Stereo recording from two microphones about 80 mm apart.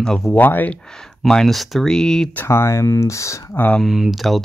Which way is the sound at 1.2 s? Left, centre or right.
Centre.